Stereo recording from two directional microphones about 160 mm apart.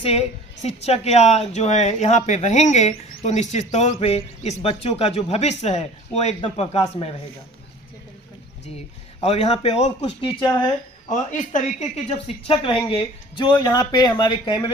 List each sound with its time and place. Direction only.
0.0 s a woman's voice: 40° left (ahead or behind)
9.2 s speech: 40° left (ahead or behind)
11.1 s a woman's voice: 50° left (ahead or behind); by 14.7 s 30° left (ahead or behind)